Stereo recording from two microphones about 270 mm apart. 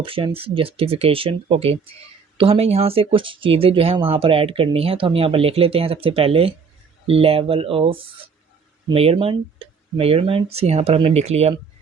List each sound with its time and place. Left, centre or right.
0.0 s speech: centre